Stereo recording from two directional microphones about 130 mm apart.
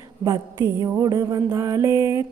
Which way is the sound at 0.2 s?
30° right (ahead or behind).